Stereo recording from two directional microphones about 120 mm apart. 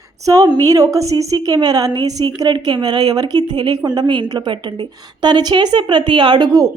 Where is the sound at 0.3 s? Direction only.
35° right (ahead or behind).